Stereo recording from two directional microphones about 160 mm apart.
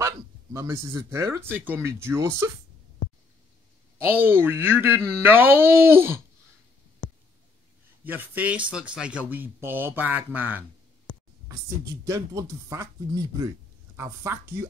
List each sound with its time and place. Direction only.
0.0 s speech: 15° right (ahead or behind)
4.1 s speech: 15° right (ahead or behind)
8.0 s speech: 10° right (ahead or behind)
11.4 s speech: 20° right (ahead or behind)